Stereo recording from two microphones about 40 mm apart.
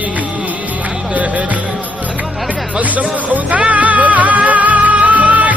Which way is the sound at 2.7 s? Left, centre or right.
Right.